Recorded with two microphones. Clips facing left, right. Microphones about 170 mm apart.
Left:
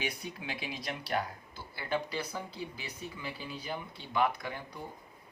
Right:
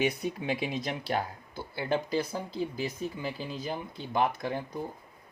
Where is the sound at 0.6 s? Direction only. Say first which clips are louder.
Right 7 dB; 25° right (ahead or behind).